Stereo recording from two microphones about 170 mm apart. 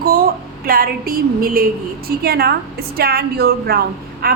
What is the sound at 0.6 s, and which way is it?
A woman's voice, 60° right (ahead or behind).